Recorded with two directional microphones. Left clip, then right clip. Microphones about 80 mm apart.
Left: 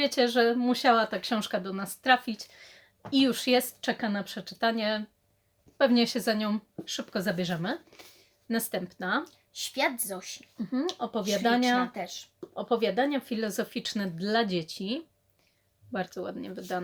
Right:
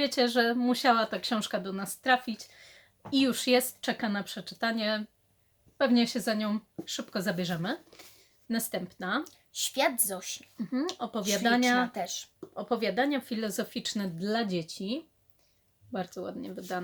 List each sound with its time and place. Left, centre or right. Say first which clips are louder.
0.0 s speech: left 2 dB; left
5.7 s speech: left 2 dB; left
9.5 s a woman's voice: right 1 dB; right
10.6 s speech: left 2 dB; centre
11.9 s a woman's voice: right 2 dB; right
12.5 s speech: left 2 dB; left